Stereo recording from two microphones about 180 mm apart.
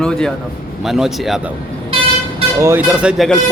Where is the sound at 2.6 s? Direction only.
15° right (ahead or behind).